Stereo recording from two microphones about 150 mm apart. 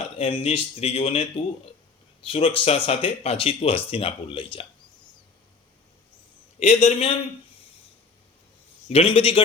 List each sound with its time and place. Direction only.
0.2 s speech: 35° left (ahead or behind)
6.6 s a man's voice: 45° left (ahead or behind)
8.9 s speech: 40° left (ahead or behind)